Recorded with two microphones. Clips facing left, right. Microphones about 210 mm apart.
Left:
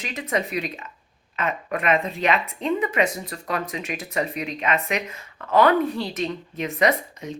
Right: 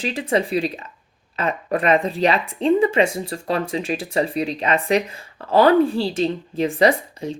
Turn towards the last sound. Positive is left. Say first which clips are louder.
# right 4 dB
turn(degrees=-30)  # may be behind; listen again after turning